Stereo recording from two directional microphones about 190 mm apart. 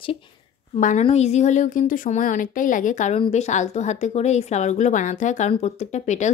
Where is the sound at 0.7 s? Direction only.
40° left (ahead or behind).